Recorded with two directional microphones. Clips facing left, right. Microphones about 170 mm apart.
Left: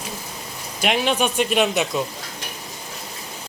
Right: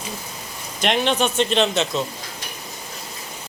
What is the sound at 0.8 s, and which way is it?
Speech, 5° left (ahead or behind).